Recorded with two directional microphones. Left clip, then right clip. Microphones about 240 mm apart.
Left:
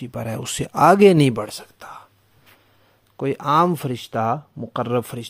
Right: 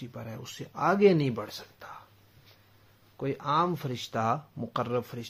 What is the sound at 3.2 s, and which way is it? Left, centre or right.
Speech, left.